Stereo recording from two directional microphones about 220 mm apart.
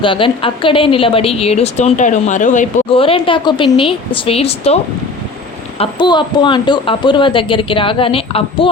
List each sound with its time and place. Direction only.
0.0 s a woman's voice: 25° left (ahead or behind)
5.8 s a woman's voice: 20° left (ahead or behind)